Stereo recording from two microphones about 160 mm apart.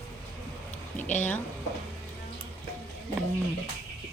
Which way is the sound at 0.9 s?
50° left (ahead or behind).